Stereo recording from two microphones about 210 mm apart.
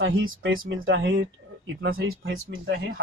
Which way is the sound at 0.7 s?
60° right (ahead or behind).